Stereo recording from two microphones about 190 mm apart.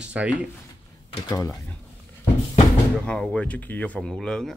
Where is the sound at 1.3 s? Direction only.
15° left (ahead or behind).